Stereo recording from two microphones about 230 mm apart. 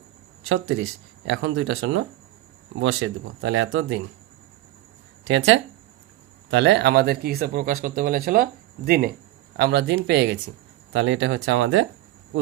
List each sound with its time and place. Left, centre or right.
0.4 s speech: right
5.3 s speech: right